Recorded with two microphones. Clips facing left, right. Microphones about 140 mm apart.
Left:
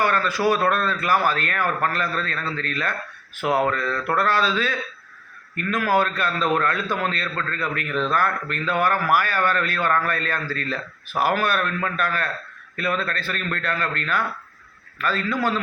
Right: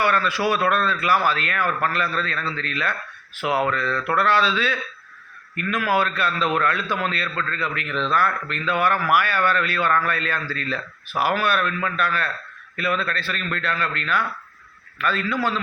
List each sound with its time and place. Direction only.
0.0 s speech: 40° left (ahead or behind)